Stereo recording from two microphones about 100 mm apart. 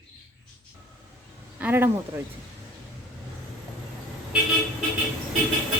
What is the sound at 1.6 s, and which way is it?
Speech, 20° right (ahead or behind).